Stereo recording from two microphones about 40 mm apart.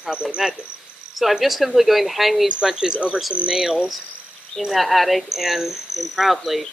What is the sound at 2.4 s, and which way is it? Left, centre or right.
Speech, centre.